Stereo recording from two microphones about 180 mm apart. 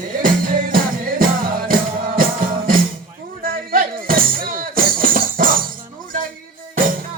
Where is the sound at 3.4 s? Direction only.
50° right (ahead or behind).